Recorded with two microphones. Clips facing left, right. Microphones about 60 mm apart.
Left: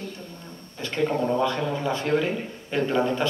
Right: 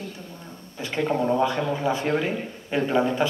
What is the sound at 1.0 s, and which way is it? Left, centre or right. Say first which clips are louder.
A man's voice: right 1 dB; centre.